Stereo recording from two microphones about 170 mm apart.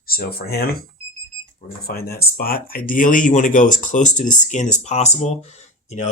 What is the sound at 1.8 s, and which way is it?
Speech, 65° left (ahead or behind).